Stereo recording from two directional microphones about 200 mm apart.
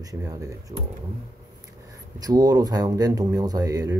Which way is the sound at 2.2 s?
20° right (ahead or behind).